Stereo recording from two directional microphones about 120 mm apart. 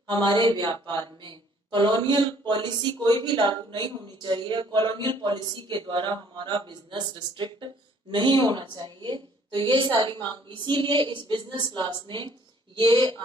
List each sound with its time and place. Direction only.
0.0 s speech: 40° right (ahead or behind)